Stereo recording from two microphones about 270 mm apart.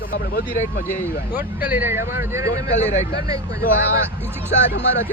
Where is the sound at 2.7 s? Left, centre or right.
Left.